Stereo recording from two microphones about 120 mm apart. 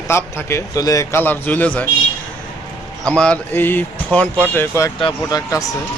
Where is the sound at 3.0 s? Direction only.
10° left (ahead or behind).